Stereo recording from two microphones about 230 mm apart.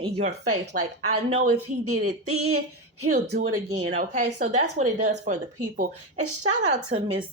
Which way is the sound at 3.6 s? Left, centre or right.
Right.